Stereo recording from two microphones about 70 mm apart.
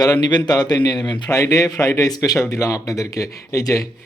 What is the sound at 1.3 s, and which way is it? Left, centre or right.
Speech, left.